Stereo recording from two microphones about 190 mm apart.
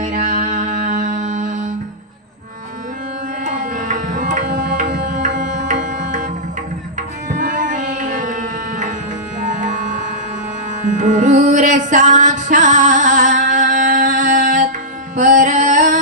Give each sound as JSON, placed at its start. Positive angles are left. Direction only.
{"t": 0.0, "sound": "music", "side_deg": -40}
{"t": 3.4, "sound": "tabla", "side_deg": -40}
{"t": 5.0, "sound": "music", "side_deg": -40}
{"t": 5.4, "sound": "tabla", "side_deg": -40}
{"t": 7.3, "sound": "music", "side_deg": -45}